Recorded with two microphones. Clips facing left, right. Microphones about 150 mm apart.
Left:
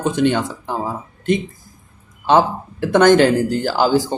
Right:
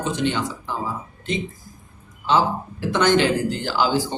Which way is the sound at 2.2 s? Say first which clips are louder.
Left 5 dB; 55° left (ahead or behind).